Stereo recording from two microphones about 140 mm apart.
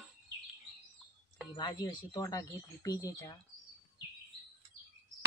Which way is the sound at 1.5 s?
30° left (ahead or behind).